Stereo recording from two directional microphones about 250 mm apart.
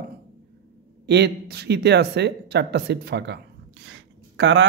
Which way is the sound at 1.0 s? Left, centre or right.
Right.